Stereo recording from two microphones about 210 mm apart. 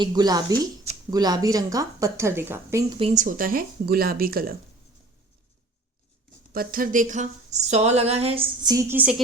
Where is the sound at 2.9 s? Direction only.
30° right (ahead or behind).